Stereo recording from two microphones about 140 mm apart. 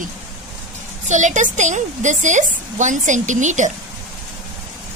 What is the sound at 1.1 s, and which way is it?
A woman's voice, 60° right (ahead or behind).